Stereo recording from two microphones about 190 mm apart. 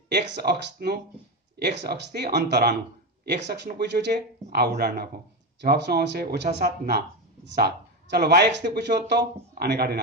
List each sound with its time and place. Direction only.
0.1 s speech: 65° right (ahead or behind)